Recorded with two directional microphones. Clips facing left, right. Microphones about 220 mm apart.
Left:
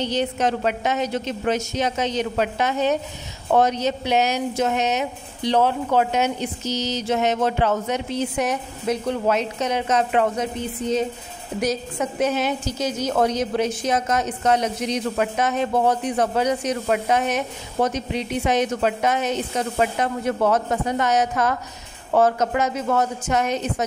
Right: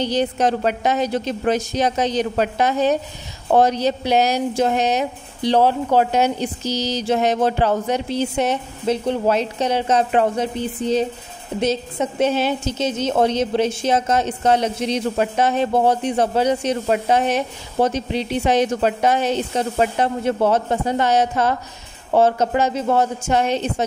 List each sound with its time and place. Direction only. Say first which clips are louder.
0.0 s a woman's voice: right 3 dB; 35° right (ahead or behind)